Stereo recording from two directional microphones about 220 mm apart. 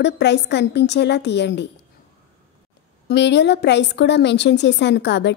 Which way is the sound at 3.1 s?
50° left (ahead or behind).